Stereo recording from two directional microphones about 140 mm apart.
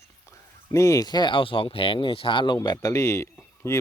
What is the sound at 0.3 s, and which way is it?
Speech, 20° left (ahead or behind).